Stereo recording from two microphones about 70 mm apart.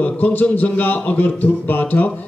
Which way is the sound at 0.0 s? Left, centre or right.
Left.